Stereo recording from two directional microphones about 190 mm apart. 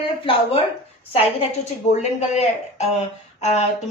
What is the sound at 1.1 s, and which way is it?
A woman's voice, 30° left (ahead or behind).